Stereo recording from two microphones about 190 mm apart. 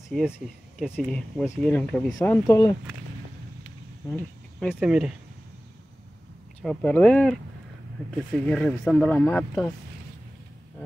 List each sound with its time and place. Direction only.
0.7 s speech: 5° right (ahead or behind); by 2.7 s 20° left (ahead or behind)
4.1 s speech: 5° left (ahead or behind)
4.7 s speech: 5° right (ahead or behind)
6.6 s speech: 5° left (ahead or behind)
8.5 s speech: 5° left (ahead or behind)